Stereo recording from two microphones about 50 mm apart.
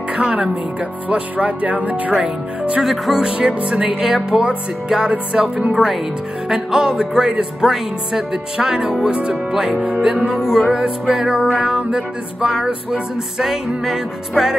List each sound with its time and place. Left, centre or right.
0.1 s speech: centre
2.8 s music: centre
5.3 s speech: centre
6.5 s music: centre
9.7 s speech: right
10.3 s music: centre